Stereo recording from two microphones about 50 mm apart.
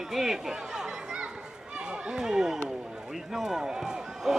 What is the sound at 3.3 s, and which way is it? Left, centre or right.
Speech, centre.